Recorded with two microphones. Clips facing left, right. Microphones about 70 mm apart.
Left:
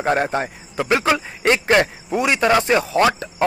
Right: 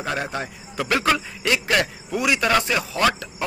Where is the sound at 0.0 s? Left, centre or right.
Left.